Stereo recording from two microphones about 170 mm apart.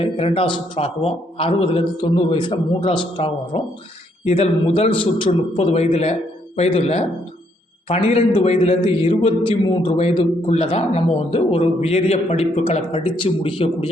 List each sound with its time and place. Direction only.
0.0 s a man's voice: 35° left (ahead or behind)